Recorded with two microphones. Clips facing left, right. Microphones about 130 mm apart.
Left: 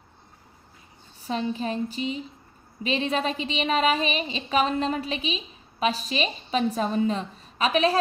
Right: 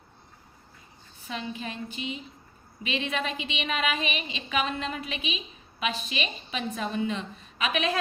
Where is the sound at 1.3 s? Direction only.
35° left (ahead or behind).